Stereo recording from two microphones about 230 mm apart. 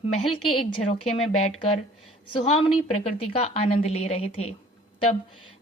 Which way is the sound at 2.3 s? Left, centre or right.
Left.